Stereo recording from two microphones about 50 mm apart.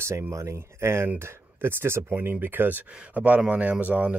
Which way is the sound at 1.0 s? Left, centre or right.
Right.